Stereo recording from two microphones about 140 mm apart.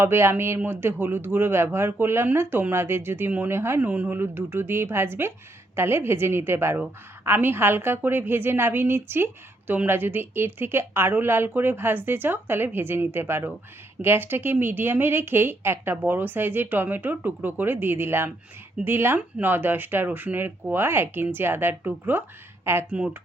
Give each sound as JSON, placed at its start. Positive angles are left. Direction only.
{"t": 0.0, "sound": "a woman's voice", "side_deg": -15}